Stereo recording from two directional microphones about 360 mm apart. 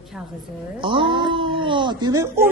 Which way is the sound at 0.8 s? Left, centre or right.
Centre.